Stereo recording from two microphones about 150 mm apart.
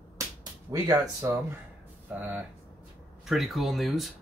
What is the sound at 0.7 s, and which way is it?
Speech, 25° right (ahead or behind).